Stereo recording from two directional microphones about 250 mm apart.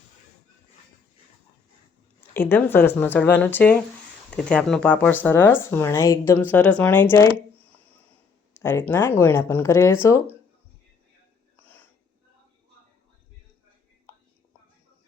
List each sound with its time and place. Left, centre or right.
2.3 s speech: centre
8.5 s speech: centre